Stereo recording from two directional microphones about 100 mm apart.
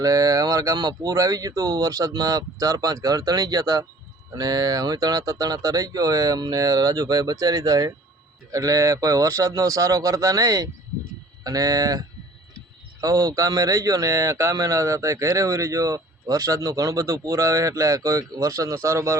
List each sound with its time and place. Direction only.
0.0 s speech: 35° right (ahead or behind)